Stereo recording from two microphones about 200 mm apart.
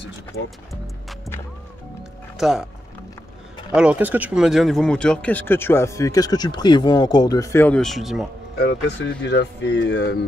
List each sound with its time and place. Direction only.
2.3 s speech: centre (ahead or behind)
3.7 s speech: 5° right (ahead or behind)
8.5 s speech: 55° left (ahead or behind)